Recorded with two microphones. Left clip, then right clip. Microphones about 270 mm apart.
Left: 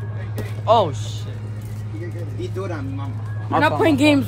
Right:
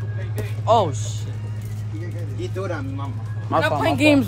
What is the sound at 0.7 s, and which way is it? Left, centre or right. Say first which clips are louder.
Speech: left 1 dB; centre.